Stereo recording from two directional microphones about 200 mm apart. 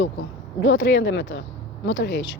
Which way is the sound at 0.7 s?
65° left (ahead or behind).